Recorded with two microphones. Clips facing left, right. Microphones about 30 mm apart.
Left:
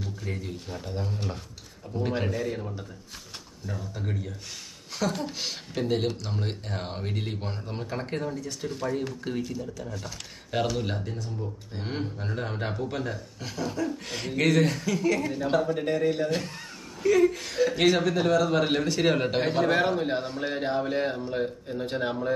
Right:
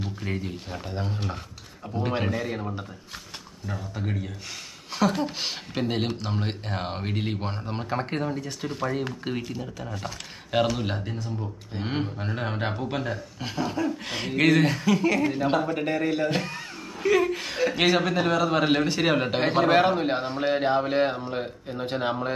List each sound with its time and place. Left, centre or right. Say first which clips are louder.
0.0 s a sound: right 4 dB; right
0.4 s a man's voice: right 2 dB; right
9.9 s speech: right 3 dB; right
19.5 s a man's voice: right 6 dB; right
20.5 s a man's voice: right 4 dB; right